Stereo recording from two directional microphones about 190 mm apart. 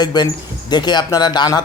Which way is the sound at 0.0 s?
20° left (ahead or behind).